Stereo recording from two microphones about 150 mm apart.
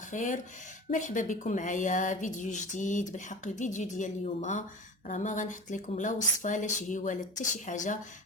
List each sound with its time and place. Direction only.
0.1 s a woman's voice: 60° left (ahead or behind)